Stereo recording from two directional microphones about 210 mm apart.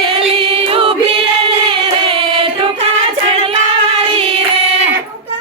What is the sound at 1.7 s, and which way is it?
Singing, 25° right (ahead or behind).